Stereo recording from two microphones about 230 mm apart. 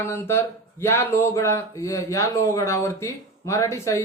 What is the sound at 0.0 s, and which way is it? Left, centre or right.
A man's voice, centre.